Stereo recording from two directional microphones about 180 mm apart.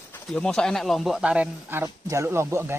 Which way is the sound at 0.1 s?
5° left (ahead or behind).